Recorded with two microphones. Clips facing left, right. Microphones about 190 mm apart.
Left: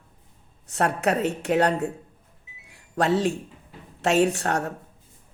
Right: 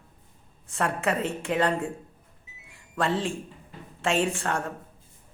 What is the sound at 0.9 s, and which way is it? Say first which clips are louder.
Speech: left 4 dB; 40° left (ahead or behind).